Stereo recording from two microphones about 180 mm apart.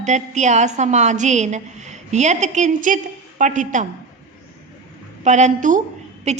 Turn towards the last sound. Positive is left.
turn(degrees=-40)  # may be behind; listen again after turning